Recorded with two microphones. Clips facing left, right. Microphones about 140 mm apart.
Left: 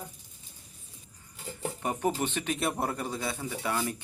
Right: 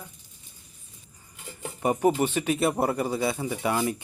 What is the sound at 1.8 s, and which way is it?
Speech, 10° right (ahead or behind).